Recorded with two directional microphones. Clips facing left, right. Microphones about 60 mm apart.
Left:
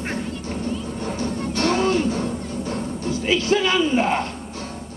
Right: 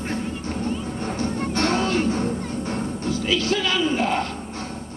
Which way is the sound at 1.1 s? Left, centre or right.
Right.